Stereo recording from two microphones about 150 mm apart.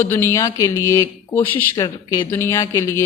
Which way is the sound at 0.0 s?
15° left (ahead or behind).